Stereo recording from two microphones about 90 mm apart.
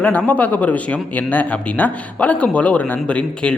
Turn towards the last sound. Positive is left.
turn(degrees=15)  # may be behind; listen again after turning